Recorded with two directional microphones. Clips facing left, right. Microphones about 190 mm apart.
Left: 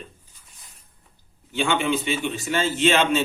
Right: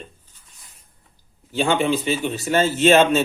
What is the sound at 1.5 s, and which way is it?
Speech, 35° right (ahead or behind).